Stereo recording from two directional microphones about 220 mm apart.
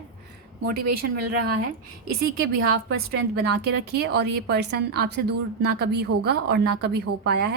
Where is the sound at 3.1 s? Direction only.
45° right (ahead or behind).